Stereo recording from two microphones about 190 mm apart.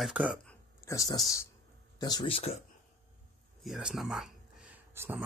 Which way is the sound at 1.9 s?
20° left (ahead or behind).